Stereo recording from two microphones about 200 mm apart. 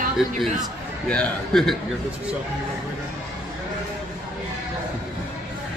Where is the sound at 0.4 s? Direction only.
5° left (ahead or behind).